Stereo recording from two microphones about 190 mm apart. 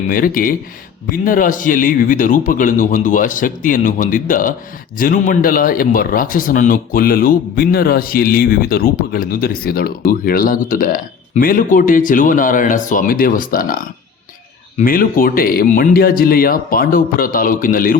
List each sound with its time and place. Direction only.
0.1 s a man's voice: 50° left (ahead or behind)
14.8 s a man's voice: 50° left (ahead or behind)